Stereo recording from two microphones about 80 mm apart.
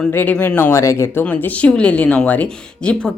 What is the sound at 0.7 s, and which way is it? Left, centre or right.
Speech, left.